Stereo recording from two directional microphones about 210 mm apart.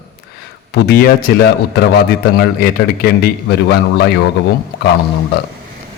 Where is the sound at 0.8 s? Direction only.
50° left (ahead or behind).